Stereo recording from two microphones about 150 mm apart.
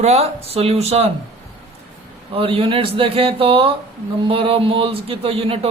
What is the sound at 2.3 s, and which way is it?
Speech, 35° right (ahead or behind).